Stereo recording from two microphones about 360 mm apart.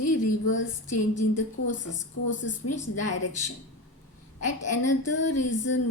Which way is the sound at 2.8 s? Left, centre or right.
Left.